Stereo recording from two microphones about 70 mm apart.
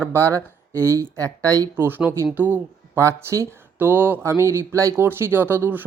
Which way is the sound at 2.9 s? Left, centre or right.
Right.